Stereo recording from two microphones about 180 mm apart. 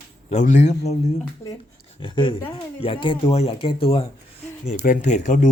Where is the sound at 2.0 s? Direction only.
25° left (ahead or behind).